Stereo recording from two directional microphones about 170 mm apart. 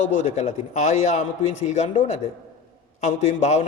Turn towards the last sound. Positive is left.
turn(degrees=40)  # may be behind; listen again after turning